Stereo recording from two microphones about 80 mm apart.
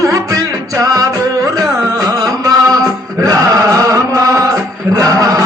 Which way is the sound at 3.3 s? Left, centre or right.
Right.